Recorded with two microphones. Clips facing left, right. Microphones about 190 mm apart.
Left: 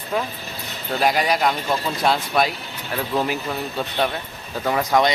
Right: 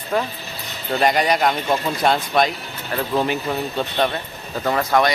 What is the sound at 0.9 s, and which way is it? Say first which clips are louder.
Speech: right 2 dB; centre (ahead or behind).